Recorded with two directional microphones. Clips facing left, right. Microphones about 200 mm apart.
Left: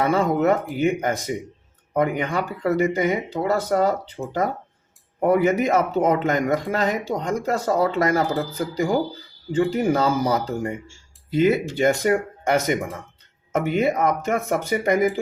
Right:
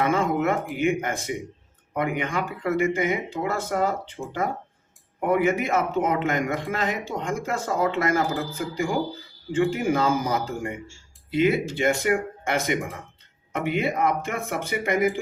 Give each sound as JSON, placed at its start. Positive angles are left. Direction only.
{"t": 0.1, "sound": "speech", "side_deg": 40}